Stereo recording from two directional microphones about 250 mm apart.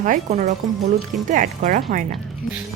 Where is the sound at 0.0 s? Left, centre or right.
Right.